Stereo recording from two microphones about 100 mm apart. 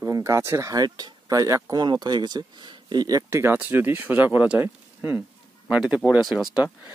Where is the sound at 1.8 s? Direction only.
45° right (ahead or behind).